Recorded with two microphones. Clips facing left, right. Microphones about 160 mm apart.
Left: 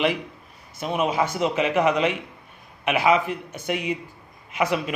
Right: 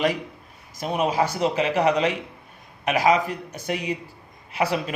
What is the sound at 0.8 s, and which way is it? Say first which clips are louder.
A man's voice: right 1 dB; 40° right (ahead or behind).